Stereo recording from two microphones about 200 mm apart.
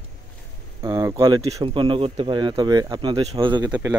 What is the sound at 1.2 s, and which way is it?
Speech, 20° right (ahead or behind).